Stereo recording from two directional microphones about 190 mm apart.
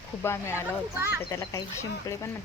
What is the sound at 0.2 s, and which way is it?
Speech, 15° left (ahead or behind).